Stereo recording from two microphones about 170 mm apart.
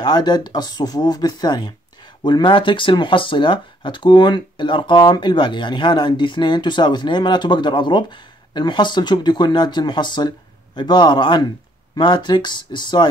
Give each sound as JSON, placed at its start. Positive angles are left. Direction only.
{"t": 0.0, "sound": "speech", "side_deg": 25}